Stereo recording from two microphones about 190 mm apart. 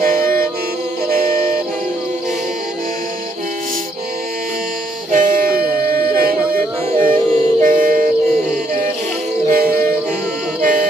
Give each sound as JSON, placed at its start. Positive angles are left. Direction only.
{"t": 0.0, "sound": "music", "side_deg": -50}
{"t": 5.1, "sound": "music", "side_deg": -45}
{"t": 9.5, "sound": "music", "side_deg": -50}